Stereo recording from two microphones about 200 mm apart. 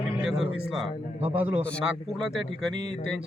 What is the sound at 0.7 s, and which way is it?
A man's voice, centre (ahead or behind).